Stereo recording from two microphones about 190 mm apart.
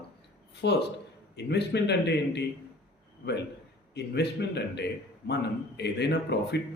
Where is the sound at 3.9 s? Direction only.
60° left (ahead or behind).